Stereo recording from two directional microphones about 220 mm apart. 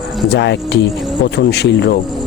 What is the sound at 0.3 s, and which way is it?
A man's voice, 50° left (ahead or behind).